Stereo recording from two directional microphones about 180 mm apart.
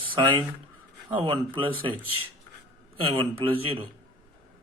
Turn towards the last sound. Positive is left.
turn(degrees=-30)  # may be behind; listen again after turning